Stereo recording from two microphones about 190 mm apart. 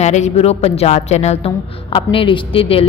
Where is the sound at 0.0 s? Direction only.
35° left (ahead or behind).